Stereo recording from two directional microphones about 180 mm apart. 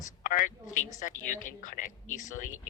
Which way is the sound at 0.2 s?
50° left (ahead or behind).